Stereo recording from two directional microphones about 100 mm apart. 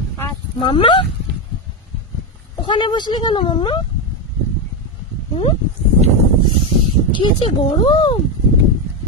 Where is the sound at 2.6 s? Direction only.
55° left (ahead or behind).